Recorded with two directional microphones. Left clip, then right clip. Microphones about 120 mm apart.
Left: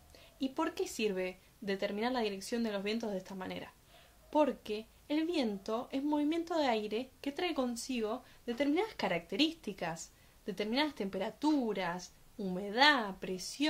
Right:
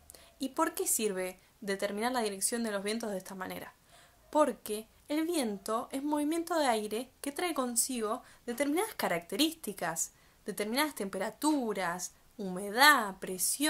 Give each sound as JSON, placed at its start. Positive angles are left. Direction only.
{"t": 0.4, "sound": "a woman's voice", "side_deg": 20}